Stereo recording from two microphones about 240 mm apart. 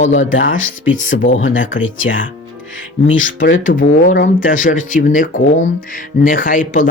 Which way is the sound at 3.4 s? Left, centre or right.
Left.